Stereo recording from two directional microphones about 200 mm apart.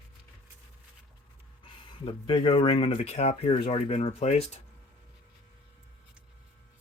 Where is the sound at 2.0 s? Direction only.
25° left (ahead or behind).